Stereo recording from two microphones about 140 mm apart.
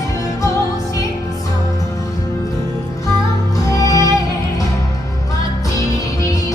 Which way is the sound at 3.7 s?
25° left (ahead or behind).